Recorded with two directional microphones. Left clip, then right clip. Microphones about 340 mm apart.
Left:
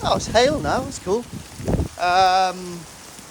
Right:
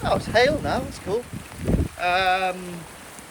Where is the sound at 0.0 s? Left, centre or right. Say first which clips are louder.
Left 2 dB; centre.